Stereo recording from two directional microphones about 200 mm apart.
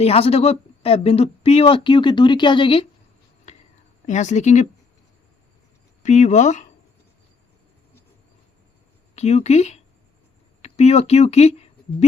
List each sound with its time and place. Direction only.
0.0 s speech: 30° left (ahead or behind)
4.0 s speech: 35° left (ahead or behind)
6.0 s speech: 35° left (ahead or behind)
9.1 s speech: 35° left (ahead or behind)